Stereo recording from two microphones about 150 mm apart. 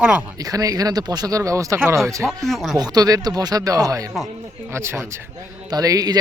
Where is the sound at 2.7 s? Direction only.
25° right (ahead or behind).